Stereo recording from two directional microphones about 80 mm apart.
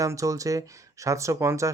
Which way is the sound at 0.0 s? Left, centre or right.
Right.